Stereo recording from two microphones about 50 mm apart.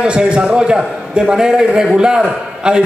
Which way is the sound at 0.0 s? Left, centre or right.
Centre.